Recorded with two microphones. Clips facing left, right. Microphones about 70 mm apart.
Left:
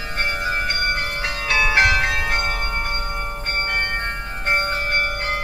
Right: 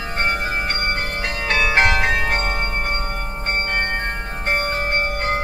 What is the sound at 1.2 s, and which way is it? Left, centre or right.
Bell, right.